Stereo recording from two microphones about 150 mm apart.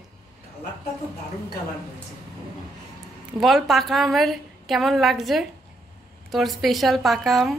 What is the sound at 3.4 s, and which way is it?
A woman's voice, centre (ahead or behind).